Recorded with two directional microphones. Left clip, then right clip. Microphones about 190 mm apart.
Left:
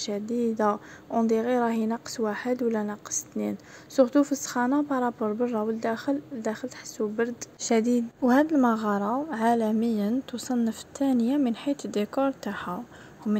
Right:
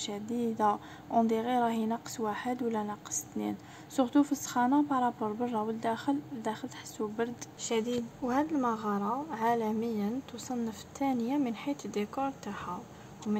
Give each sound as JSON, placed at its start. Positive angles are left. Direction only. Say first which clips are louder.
{"t": 0.0, "sound": "a woman's voice", "louder": "left 6 dB", "side_deg": 20}